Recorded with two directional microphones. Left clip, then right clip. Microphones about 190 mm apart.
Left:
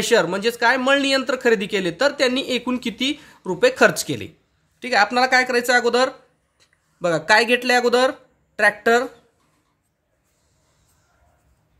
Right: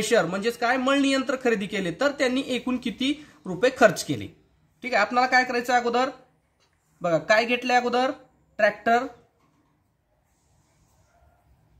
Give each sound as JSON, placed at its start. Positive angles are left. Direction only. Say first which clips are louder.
{"t": 0.0, "sound": "speech", "louder": "left 5 dB", "side_deg": 25}